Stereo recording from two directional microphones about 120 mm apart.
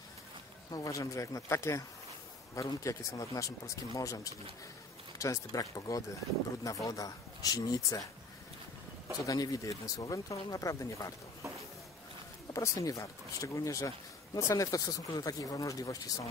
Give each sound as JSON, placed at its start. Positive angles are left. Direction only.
{"t": 0.7, "sound": "speech", "side_deg": 30}
{"t": 9.2, "sound": "speech", "side_deg": 30}
{"t": 12.5, "sound": "speech", "side_deg": 30}